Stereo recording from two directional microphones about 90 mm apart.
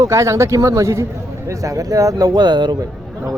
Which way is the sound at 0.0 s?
35° right (ahead or behind).